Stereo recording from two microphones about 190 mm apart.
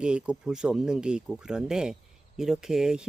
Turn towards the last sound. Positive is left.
turn(degrees=-5)  # may be behind; listen again after turning